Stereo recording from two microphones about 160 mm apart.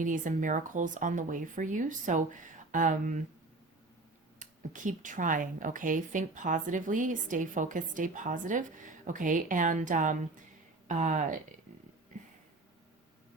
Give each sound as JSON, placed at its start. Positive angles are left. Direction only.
{"t": 0.0, "sound": "speech", "side_deg": -55}
{"t": 4.4, "sound": "a woman's voice", "side_deg": -55}